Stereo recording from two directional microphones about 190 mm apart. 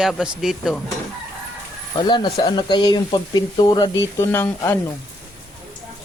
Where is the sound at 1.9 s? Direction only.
25° left (ahead or behind).